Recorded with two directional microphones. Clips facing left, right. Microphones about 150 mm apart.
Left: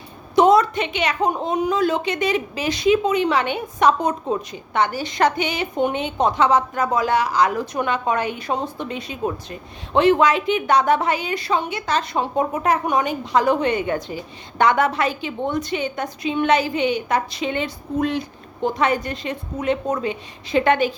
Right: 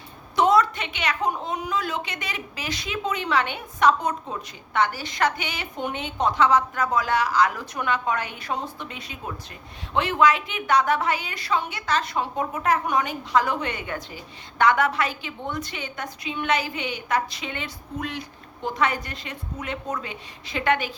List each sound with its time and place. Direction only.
0.3 s a woman's voice: 15° left (ahead or behind)